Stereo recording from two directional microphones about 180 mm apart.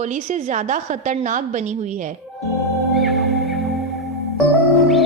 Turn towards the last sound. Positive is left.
turn(degrees=0)  # may be behind; listen again after turning